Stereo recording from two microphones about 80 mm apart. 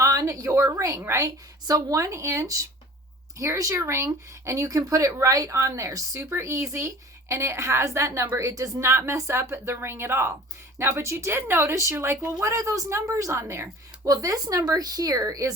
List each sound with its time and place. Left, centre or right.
0.0 s speech: right
1.0 s speech: right
1.6 s speech: right
14.1 s speech: right